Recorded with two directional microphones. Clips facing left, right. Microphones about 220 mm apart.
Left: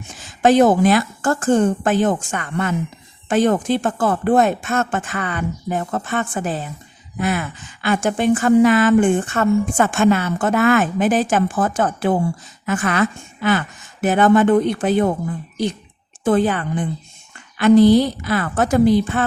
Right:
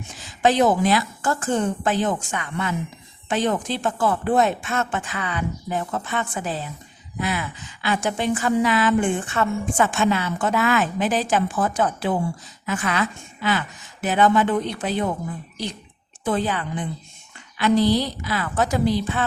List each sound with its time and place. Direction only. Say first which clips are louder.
0.2 s a woman's voice: left 5 dB; 50° left (ahead or behind)
16.2 s a woman's voice: left 7 dB; 50° left (ahead or behind)